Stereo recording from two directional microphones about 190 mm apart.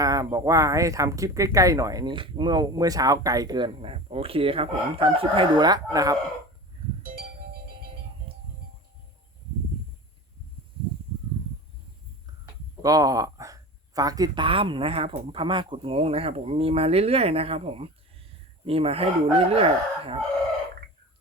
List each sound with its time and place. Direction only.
0.0 s speech: 20° right (ahead or behind)
7.0 s music: 50° right (ahead or behind)
12.8 s speech: 20° right (ahead or behind)
18.6 s crowing: 30° right (ahead or behind)